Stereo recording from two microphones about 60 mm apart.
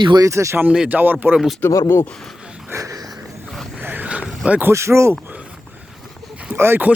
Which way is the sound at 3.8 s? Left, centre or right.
Right.